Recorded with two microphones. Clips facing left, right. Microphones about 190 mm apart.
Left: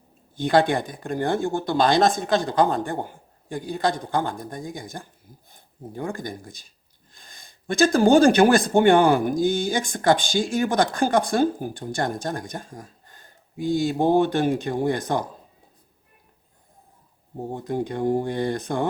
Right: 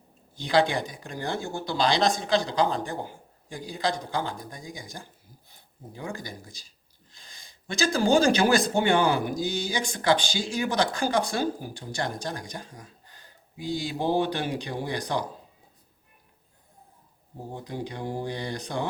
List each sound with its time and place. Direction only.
0.3 s speech: 55° left (ahead or behind)
17.5 s speech: 50° left (ahead or behind)